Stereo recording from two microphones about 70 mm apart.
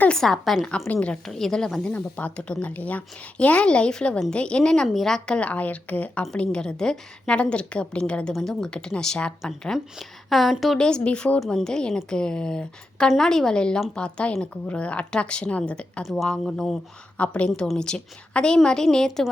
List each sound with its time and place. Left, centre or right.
0.1 s speech: centre
0.9 s speech: centre
1.3 s speech: centre
1.9 s speech: left
9.7 s speech: centre
10.8 s speech: centre
11.3 s speech: centre
16.0 s speech: centre
17.2 s a woman's voice: centre